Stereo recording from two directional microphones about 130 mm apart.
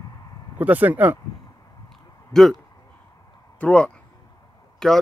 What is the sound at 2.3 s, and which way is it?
Speech, 5° left (ahead or behind).